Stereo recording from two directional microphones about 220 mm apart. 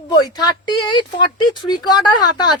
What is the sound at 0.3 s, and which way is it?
Speech, 20° left (ahead or behind).